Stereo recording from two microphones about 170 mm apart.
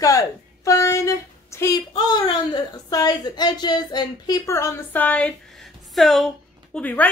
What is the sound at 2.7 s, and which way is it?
A woman's voice, 20° left (ahead or behind).